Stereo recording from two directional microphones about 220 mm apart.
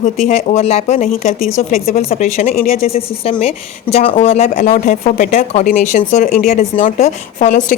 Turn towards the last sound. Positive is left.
turn(degrees=35)  # may be behind; listen again after turning